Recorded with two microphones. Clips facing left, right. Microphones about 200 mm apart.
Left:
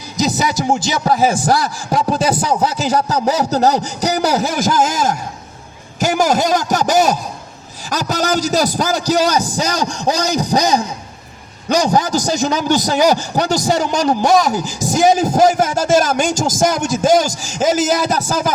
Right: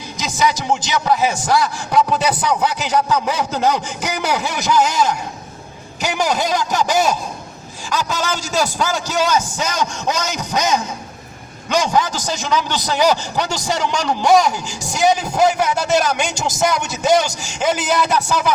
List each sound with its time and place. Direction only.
0.2 s a man's voice: 40° left (ahead or behind)